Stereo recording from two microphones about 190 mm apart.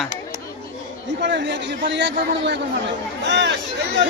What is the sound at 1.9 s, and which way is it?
Speech, 70° right (ahead or behind).